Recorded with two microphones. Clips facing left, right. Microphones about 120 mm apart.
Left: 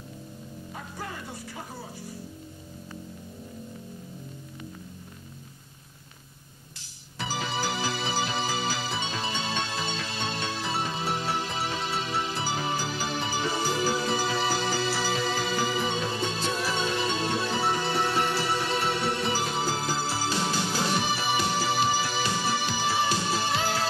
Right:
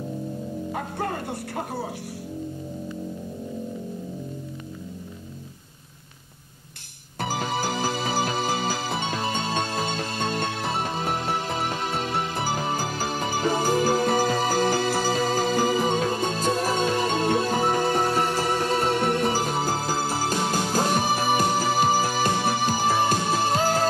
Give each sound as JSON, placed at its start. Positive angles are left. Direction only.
{"t": 0.7, "sound": "music", "side_deg": -60}
{"t": 7.2, "sound": "music", "side_deg": -50}